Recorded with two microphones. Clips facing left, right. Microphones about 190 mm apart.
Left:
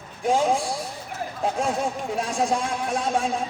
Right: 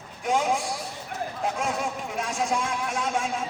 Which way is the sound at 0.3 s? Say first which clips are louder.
Left 3 dB; 30° left (ahead or behind).